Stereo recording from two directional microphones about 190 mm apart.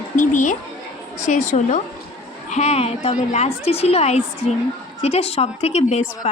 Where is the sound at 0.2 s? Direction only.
40° left (ahead or behind).